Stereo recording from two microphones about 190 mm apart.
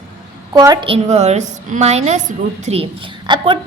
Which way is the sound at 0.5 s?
20° right (ahead or behind).